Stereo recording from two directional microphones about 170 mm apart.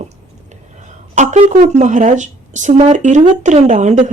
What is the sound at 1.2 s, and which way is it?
A woman's voice, 45° right (ahead or behind).